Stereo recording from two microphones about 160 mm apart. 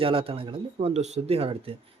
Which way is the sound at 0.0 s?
35° right (ahead or behind).